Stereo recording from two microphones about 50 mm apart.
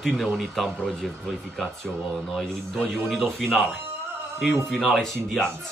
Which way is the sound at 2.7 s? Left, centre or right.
Centre.